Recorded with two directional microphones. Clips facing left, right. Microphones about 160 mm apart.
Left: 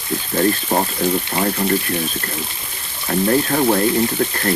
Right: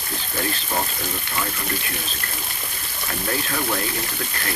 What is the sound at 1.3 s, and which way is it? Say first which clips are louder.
Speech: left 8 dB; 45° left (ahead or behind).